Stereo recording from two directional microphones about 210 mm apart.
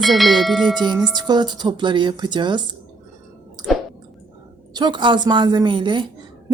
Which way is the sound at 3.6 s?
20° right (ahead or behind).